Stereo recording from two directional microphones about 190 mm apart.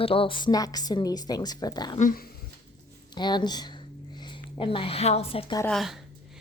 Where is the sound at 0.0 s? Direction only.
30° left (ahead or behind).